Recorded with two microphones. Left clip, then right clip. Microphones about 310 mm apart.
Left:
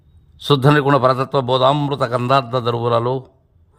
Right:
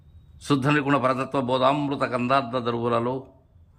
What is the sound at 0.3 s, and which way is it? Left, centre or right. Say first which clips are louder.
A man's voice: left 8 dB; centre.